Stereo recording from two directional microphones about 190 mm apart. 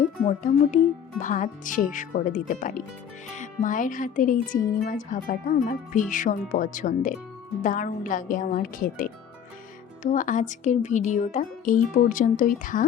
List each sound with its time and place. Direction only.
0.3 s speech: 40° left (ahead or behind)